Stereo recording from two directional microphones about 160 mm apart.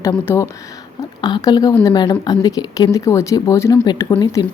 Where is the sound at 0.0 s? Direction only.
20° left (ahead or behind).